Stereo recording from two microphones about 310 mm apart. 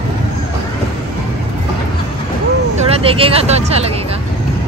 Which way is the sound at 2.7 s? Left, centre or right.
Centre.